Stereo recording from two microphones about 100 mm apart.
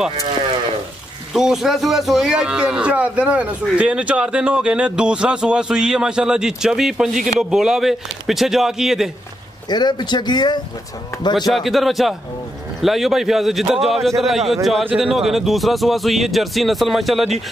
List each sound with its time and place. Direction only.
1.3 s a man's voice: 5° right (ahead or behind)
9.7 s speech: 45° left (ahead or behind)
11.5 s speech: centre (ahead or behind)